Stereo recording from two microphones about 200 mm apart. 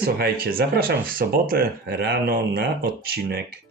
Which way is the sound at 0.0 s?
50° right (ahead or behind).